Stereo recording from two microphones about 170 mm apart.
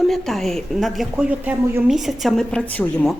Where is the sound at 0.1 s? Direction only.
Centre (ahead or behind).